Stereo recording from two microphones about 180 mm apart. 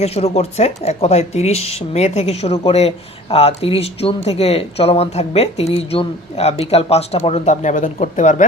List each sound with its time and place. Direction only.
0.0 s speech: 35° left (ahead or behind)